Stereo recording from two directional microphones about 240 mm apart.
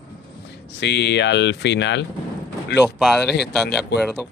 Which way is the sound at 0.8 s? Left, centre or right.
Left.